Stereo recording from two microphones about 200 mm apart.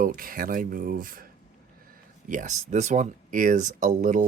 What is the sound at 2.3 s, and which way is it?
Speech, 40° right (ahead or behind).